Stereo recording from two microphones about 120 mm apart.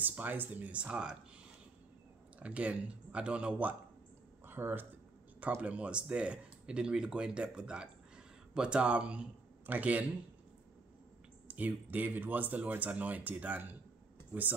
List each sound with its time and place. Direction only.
0.0 s speech: 15° right (ahead or behind)
2.3 s speech: 10° right (ahead or behind)
11.4 s speech: 15° right (ahead or behind)